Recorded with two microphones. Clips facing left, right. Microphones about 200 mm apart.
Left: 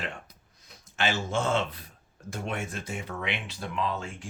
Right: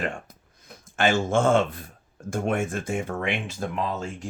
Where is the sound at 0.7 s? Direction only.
50° right (ahead or behind).